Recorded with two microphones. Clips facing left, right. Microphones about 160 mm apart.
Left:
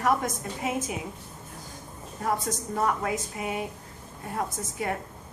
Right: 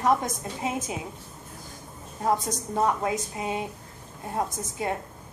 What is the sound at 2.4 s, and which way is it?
A woman's voice, 20° right (ahead or behind).